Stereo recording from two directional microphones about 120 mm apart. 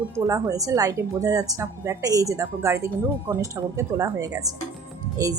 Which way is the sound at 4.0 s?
30° right (ahead or behind).